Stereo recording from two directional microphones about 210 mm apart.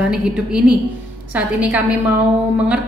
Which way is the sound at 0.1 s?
5° right (ahead or behind).